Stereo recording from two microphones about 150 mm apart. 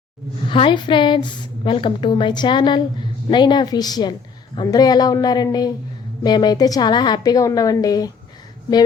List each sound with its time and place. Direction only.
0.4 s a woman's voice: 35° left (ahead or behind)